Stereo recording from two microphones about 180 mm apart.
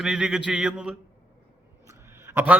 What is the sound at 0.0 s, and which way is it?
A man's voice, 5° right (ahead or behind).